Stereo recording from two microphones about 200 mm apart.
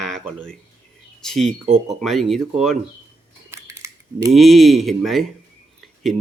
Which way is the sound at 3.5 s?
15° right (ahead or behind).